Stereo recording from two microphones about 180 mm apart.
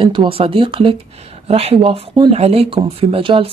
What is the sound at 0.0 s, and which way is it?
Speech, 25° right (ahead or behind).